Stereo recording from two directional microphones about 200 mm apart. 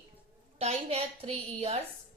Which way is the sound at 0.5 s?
30° right (ahead or behind).